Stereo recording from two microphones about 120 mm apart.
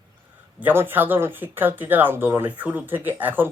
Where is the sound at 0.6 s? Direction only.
20° right (ahead or behind).